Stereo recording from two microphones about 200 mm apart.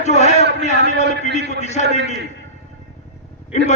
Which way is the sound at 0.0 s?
35° left (ahead or behind).